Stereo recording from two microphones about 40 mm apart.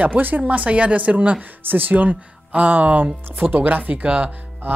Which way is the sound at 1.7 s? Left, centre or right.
Right.